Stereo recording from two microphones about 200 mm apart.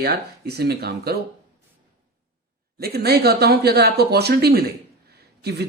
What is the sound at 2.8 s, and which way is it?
Speech, 50° right (ahead or behind).